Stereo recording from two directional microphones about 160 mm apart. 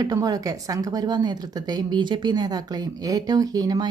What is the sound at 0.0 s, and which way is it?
A woman's voice, 25° right (ahead or behind).